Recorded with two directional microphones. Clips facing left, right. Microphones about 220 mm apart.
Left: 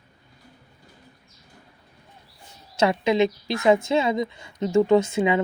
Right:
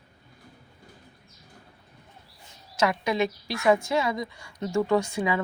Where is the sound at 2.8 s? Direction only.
25° left (ahead or behind).